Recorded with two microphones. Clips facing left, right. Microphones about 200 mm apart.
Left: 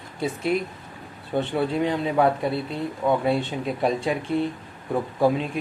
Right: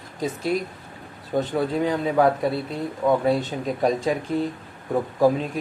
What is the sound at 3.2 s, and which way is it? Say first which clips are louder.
Speech: right 1 dB; 40° right (ahead or behind).